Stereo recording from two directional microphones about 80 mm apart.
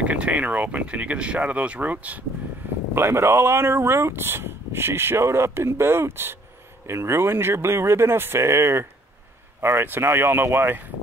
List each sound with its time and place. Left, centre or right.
0.0 s speech: centre
2.9 s speech: right